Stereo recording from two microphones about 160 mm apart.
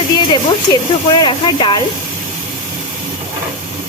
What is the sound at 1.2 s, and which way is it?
Speech, 30° left (ahead or behind).